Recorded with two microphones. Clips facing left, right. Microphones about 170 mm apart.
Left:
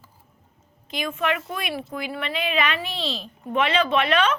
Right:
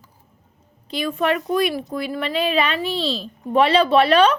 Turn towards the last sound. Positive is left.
turn(degrees=-35)  # may be behind; listen again after turning